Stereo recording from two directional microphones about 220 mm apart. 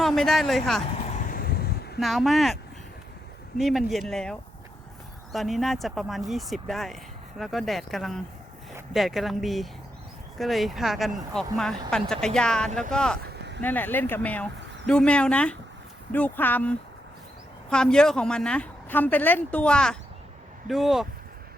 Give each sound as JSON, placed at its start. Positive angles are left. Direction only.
{"t": 0.0, "sound": "speech", "side_deg": 0}
{"t": 1.1, "sound": "vehicle", "side_deg": 40}
{"t": 2.0, "sound": "a woman's voice", "side_deg": 0}
{"t": 3.6, "sound": "a woman's voice", "side_deg": 0}